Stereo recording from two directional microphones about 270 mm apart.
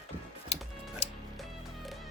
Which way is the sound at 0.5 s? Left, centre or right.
Left.